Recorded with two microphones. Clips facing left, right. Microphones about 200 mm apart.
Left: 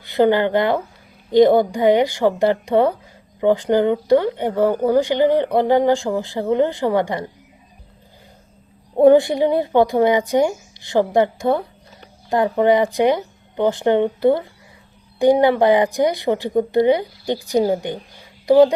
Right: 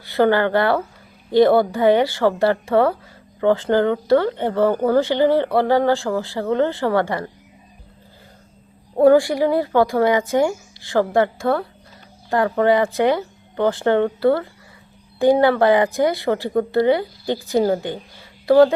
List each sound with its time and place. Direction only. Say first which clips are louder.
0.0 s speech: left 1 dB; 15° left (ahead or behind)
9.0 s a woman's voice: left 1 dB; 20° left (ahead or behind)